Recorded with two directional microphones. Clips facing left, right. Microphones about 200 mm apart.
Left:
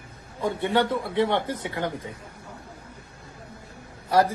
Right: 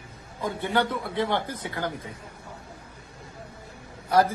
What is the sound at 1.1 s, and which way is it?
Speech, 25° left (ahead or behind).